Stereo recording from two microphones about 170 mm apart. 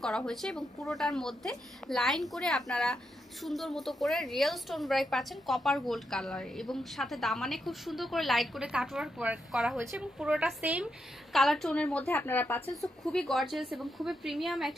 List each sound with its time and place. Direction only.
0.0 s a woman's voice: centre (ahead or behind)